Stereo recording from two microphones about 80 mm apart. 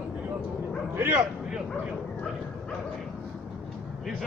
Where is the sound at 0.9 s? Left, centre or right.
Right.